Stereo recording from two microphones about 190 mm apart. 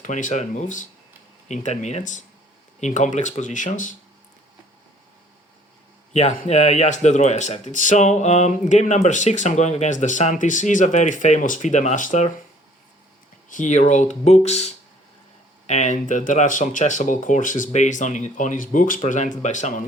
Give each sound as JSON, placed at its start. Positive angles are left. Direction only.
{"t": 0.0, "sound": "speech", "side_deg": 40}
{"t": 6.1, "sound": "speech", "side_deg": 35}
{"t": 13.5, "sound": "speech", "side_deg": 40}